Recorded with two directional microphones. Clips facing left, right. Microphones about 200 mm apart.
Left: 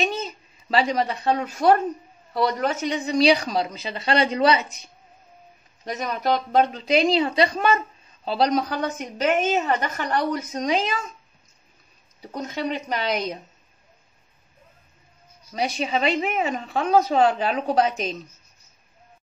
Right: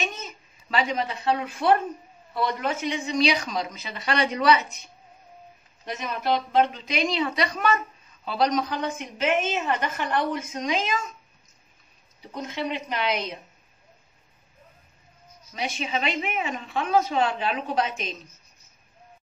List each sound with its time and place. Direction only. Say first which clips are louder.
0.0 s a child's voice: left 7 dB; 35° left (ahead or behind)
5.9 s a woman's voice: left 3 dB; 40° left (ahead or behind)
12.4 s a woman's voice: left 2 dB; 40° left (ahead or behind)
15.5 s a woman's voice: left 5 dB; 40° left (ahead or behind)